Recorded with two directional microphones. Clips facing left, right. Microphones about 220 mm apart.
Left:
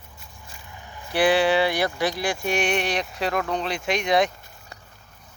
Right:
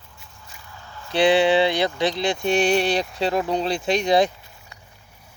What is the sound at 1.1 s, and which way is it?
Speech, 25° right (ahead or behind).